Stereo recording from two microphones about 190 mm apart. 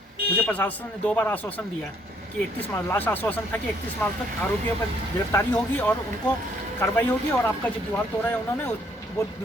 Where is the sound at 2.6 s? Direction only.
10° left (ahead or behind).